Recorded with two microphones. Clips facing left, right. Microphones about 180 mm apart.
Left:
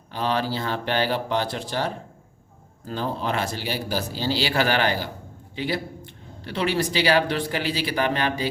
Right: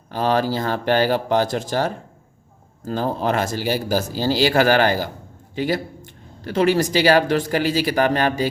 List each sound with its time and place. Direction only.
0.1 s speech: 45° right (ahead or behind)